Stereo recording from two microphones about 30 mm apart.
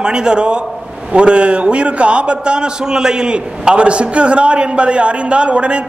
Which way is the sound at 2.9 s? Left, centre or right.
Right.